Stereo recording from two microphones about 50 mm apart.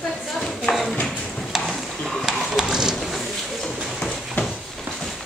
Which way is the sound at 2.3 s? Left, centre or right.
Centre.